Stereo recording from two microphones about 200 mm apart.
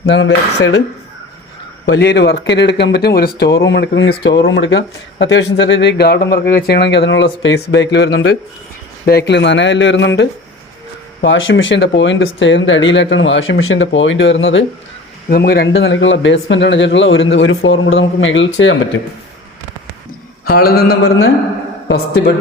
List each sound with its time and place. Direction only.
0.0 s speech: 60° left (ahead or behind)
1.9 s speech: 60° left (ahead or behind)
15.3 s speech: 50° left (ahead or behind); by 18.8 s 70° left (ahead or behind)
20.4 s a man's voice: 50° left (ahead or behind)
21.8 s speech: 55° left (ahead or behind)